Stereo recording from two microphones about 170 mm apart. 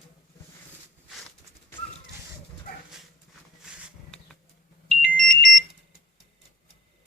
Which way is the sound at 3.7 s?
5° right (ahead or behind).